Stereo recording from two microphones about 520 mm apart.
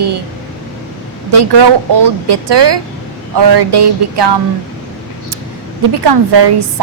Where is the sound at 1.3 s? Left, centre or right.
Right.